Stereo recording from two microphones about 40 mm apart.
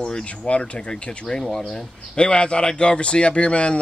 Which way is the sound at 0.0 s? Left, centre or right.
Left.